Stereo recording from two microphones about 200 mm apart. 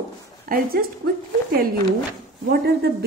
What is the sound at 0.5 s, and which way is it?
Speech, 50° right (ahead or behind).